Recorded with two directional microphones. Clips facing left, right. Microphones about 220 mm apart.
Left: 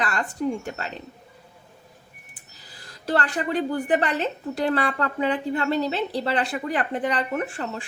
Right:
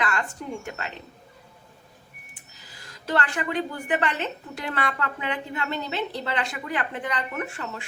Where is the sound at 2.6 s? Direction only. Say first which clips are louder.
Left 4 dB; 35° left (ahead or behind).